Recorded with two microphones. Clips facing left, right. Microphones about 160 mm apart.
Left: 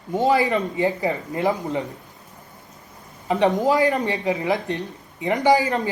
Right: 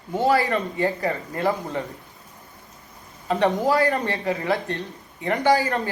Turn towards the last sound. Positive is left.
turn(degrees=20)  # may be behind; listen again after turning